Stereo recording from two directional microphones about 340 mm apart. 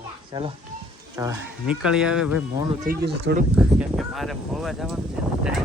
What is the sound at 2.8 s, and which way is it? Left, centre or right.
Speech, right.